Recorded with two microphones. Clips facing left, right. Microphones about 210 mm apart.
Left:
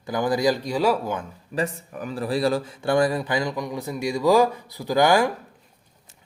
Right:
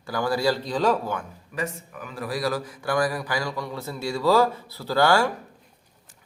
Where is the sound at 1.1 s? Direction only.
30° left (ahead or behind).